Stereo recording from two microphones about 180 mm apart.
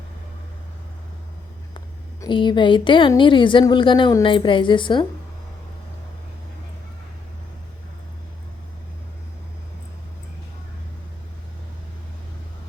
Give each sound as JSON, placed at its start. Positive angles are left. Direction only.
{"t": 2.2, "sound": "a woman's voice", "side_deg": 25}